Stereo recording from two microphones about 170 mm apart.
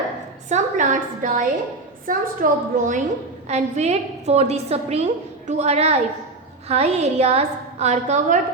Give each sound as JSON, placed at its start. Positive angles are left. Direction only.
{"t": 0.4, "sound": "a woman's voice", "side_deg": -45}
{"t": 3.5, "sound": "a woman's voice", "side_deg": -40}